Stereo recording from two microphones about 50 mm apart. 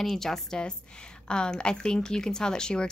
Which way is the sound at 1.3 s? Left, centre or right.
Centre.